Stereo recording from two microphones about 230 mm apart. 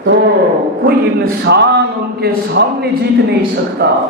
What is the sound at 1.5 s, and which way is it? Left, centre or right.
A man's voice, right.